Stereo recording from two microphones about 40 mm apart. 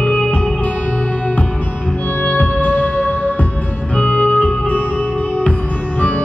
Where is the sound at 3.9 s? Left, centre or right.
Left.